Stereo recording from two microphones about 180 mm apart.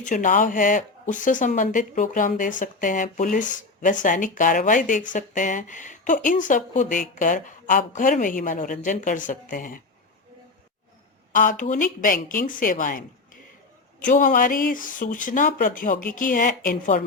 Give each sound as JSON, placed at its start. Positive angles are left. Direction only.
{"t": 0.0, "sound": "speech", "side_deg": 45}
{"t": 11.3, "sound": "speech", "side_deg": 45}